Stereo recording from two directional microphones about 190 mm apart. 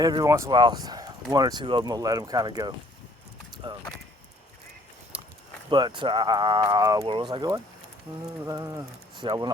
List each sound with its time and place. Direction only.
0.0 s speech: 20° right (ahead or behind)
3.5 s a sound: 20° right (ahead or behind)
5.6 s speech: 25° right (ahead or behind)